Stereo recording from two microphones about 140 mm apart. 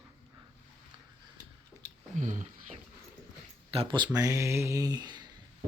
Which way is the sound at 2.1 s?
65° right (ahead or behind).